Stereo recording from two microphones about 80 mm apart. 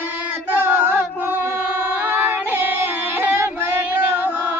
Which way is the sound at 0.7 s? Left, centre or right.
Right.